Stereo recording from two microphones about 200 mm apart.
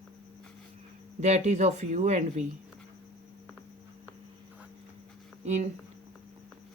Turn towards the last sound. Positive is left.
turn(degrees=-35)  # may be behind; listen again after turning